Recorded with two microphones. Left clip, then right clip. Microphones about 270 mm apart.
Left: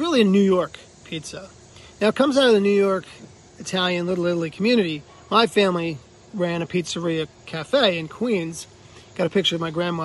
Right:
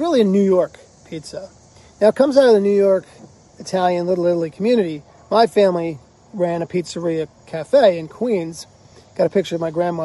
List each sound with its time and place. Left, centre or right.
0.0 s speech: left